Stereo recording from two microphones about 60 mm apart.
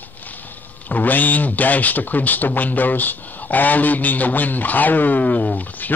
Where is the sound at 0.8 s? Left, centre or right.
Left.